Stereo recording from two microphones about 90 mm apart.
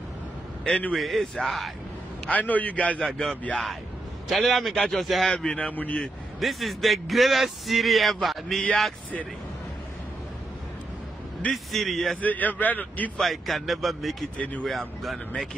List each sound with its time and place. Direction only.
0.7 s a man's voice: 15° left (ahead or behind)
0.9 s a man's voice: centre (ahead or behind)
2.2 s a man's voice: 15° left (ahead or behind); by 5.3 s centre (ahead or behind)
5.3 s a man's voice: 10° left (ahead or behind)
6.4 s a man's voice: centre (ahead or behind)
11.5 s a man's voice: centre (ahead or behind)
12.2 s a man's voice: 20° left (ahead or behind)
13.2 s a man's voice: centre (ahead or behind)
14.4 s a man's voice: 15° left (ahead or behind)
14.7 s a man's voice: centre (ahead or behind)